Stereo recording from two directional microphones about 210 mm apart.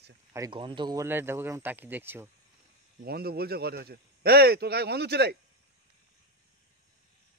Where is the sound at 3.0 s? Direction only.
45° right (ahead or behind).